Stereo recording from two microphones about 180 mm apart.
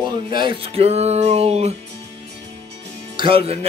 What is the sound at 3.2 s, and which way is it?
Speech, 30° right (ahead or behind).